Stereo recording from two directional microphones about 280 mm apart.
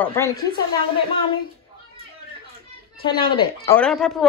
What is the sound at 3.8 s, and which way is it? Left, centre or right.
Speech, centre.